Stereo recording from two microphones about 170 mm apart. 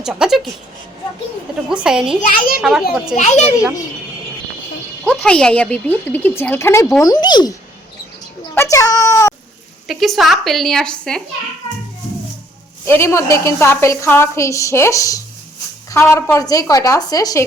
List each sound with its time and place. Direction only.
0.0 s speech: 5° right (ahead or behind)
1.7 s speech: 5° right (ahead or behind)
2.2 s a child's voice: 55° left (ahead or behind)
2.6 s speech: centre (ahead or behind)
3.2 s a child's voice: 40° left (ahead or behind)
5.0 s a woman's voice: 5° left (ahead or behind); by 7.5 s 25° left (ahead or behind)
8.5 s a woman's voice: 20° left (ahead or behind)
9.8 s speech: centre (ahead or behind)
12.8 s a woman's voice: 15° left (ahead or behind)